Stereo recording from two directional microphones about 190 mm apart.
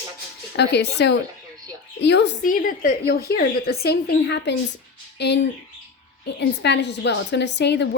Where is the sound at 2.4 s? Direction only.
45° left (ahead or behind); by 5.3 s 60° left (ahead or behind).